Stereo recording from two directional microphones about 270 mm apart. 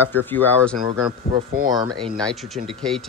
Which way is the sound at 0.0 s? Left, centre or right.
Centre.